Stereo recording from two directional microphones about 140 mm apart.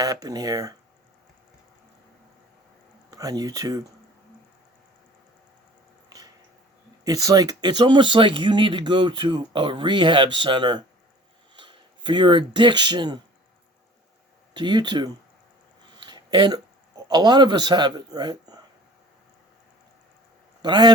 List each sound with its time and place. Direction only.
0.0 s speech: 25° right (ahead or behind)
3.1 s speech: 25° right (ahead or behind)
7.0 s speech: 25° right (ahead or behind)
14.5 s speech: 35° right (ahead or behind)
16.0 s a sound: 35° right (ahead or behind)
17.1 s speech: 35° right (ahead or behind)
20.6 s a man's voice: 35° right (ahead or behind)